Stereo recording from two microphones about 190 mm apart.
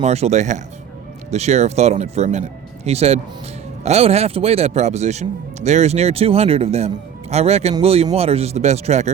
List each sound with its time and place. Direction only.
0.0 s speech: 35° right (ahead or behind)